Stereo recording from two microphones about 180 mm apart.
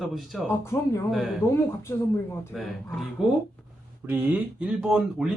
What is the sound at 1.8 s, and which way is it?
Speech, 15° left (ahead or behind).